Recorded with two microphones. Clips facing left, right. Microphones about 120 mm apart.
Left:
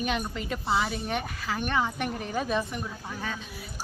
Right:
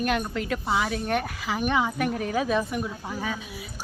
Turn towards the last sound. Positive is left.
turn(degrees=-5)  # may be behind; listen again after turning